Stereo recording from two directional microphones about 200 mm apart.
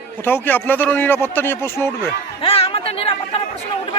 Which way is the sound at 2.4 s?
30° left (ahead or behind).